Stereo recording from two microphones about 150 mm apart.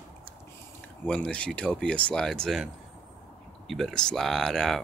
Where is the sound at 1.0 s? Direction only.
5° left (ahead or behind).